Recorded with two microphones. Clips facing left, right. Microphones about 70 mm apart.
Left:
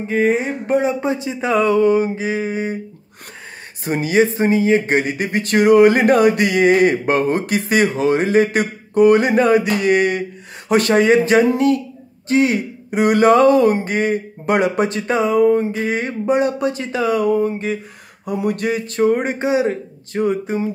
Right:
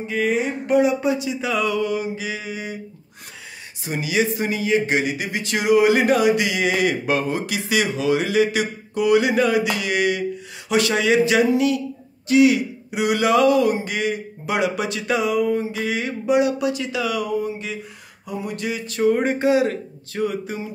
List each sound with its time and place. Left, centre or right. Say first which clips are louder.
0.1 s speech: left 4 dB; left
3.8 s speech: left 6 dB; left
18.2 s a sound: left 7 dB; left
19.1 s speech: even; left